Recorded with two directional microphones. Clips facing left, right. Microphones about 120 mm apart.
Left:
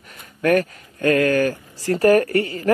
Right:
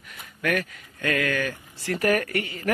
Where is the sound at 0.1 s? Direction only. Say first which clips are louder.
Left 9 dB; 40° left (ahead or behind).